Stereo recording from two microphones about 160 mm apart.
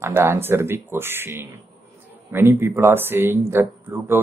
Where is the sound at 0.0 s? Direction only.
15° right (ahead or behind).